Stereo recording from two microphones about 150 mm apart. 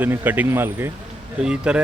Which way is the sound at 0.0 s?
10° right (ahead or behind).